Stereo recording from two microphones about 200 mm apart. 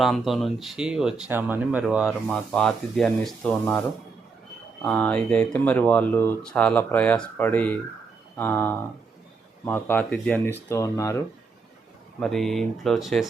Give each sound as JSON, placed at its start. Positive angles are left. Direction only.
{"t": 0.0, "sound": "speech", "side_deg": 0}
{"t": 12.2, "sound": "speech", "side_deg": 0}